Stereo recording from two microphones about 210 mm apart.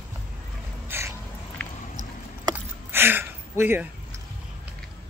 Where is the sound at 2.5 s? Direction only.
10° right (ahead or behind).